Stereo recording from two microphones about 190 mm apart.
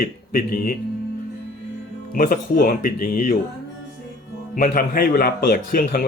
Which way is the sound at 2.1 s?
45° left (ahead or behind).